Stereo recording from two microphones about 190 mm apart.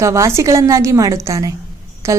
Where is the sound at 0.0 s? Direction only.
15° right (ahead or behind).